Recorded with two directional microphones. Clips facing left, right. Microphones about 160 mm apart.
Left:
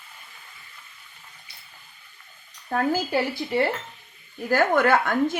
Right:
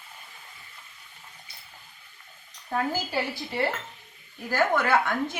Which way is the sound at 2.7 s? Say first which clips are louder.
Left 5 dB; 55° left (ahead or behind).